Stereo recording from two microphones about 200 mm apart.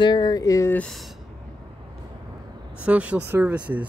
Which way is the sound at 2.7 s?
5° right (ahead or behind).